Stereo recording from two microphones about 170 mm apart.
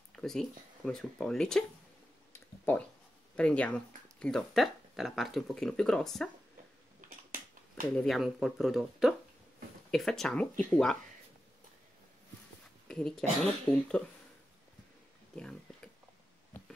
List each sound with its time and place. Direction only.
0.1 s speech: 5° left (ahead or behind)
2.3 s a sound: 10° left (ahead or behind)
3.3 s speech: 5° left (ahead or behind)
7.2 s finger snapping: 55° right (ahead or behind)
7.9 s speech: centre (ahead or behind)
12.8 s speech: 5° left (ahead or behind)
15.3 s a sound: 5° left (ahead or behind)